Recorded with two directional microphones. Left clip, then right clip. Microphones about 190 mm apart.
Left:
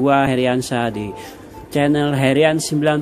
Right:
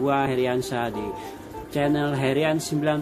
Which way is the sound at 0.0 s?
35° left (ahead or behind).